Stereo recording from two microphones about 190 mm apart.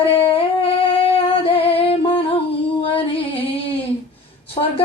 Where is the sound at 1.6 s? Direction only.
30° left (ahead or behind).